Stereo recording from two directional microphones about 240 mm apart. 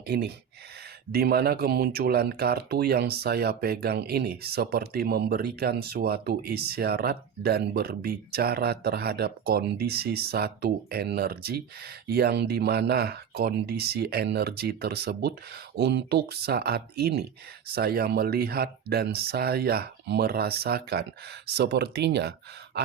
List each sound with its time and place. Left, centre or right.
1.1 s speech: right